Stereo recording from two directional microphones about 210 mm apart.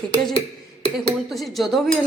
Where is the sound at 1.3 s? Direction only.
Centre (ahead or behind).